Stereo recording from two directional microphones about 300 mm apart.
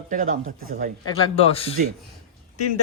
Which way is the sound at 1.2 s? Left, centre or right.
Centre.